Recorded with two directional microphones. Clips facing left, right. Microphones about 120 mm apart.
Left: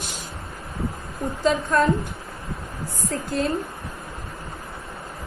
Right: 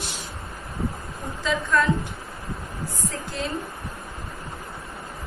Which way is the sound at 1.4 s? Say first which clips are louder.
Left 3 dB; 50° left (ahead or behind).